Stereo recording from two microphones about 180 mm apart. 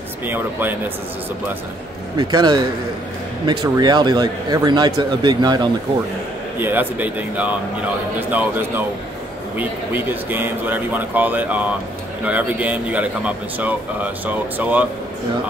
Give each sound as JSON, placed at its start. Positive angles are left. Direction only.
{"t": 0.3, "sound": "speech", "side_deg": -10}
{"t": 2.1, "sound": "speech", "side_deg": -25}
{"t": 6.6, "sound": "speech", "side_deg": -10}